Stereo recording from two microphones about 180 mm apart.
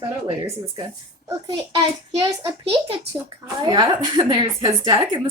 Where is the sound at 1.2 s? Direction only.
20° right (ahead or behind).